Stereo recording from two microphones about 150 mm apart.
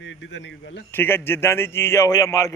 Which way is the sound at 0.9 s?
15° left (ahead or behind).